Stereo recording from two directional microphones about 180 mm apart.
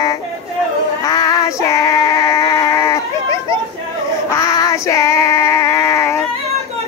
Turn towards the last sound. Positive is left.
turn(degrees=15)  # may be behind; listen again after turning